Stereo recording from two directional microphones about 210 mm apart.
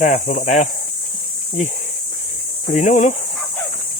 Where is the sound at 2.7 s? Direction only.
35° left (ahead or behind).